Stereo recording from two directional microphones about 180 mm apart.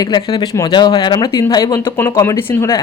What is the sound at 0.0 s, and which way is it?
Speech, 25° left (ahead or behind).